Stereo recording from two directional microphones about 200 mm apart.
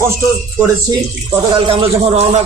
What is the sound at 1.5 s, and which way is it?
Speech, 25° right (ahead or behind).